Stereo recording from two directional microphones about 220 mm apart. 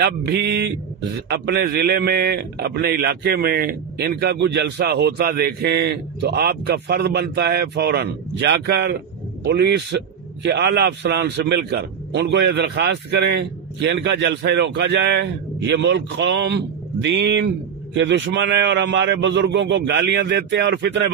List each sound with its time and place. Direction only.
0.0 s a man's voice: 50° right (ahead or behind)